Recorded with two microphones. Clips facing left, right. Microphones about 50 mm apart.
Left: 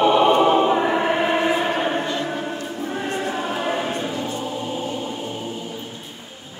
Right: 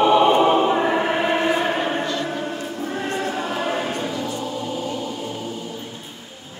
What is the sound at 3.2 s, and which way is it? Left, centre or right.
Choir, left.